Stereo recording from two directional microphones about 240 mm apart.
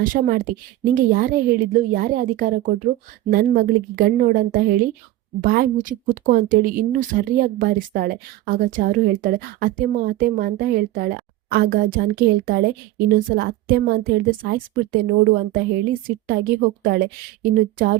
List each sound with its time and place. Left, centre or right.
0.0 s a woman's voice: right